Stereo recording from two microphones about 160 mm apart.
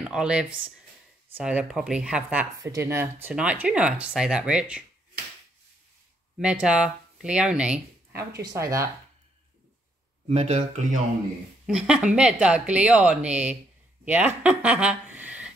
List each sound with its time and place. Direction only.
0.0 s speech: 5° right (ahead or behind)
2.6 s speech: 20° right (ahead or behind)
6.3 s speech: 5° right (ahead or behind)
10.2 s speech: 45° right (ahead or behind)
11.6 s speech: 5° right (ahead or behind)